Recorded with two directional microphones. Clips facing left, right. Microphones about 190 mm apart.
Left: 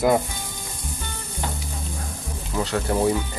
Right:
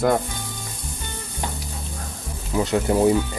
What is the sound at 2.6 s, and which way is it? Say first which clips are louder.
Speech: right 4 dB; 20° right (ahead or behind).